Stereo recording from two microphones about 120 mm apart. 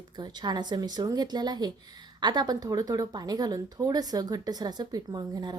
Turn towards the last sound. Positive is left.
turn(degrees=-35)  # may be behind; listen again after turning